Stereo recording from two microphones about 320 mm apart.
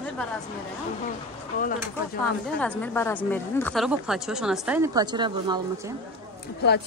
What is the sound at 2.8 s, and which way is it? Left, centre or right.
Speech, centre.